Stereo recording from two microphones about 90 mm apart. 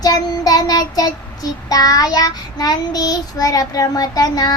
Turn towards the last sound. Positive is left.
turn(degrees=45)  # may be behind; listen again after turning